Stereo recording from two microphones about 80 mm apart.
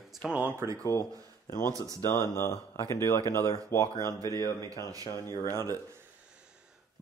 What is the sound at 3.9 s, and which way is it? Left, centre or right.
Speech, right.